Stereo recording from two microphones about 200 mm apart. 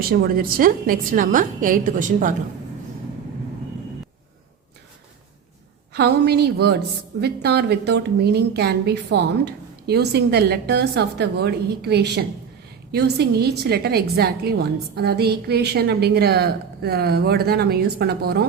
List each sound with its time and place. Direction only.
0.2 s a woman's voice: 45° right (ahead or behind)
5.9 s a woman's voice: 55° right (ahead or behind)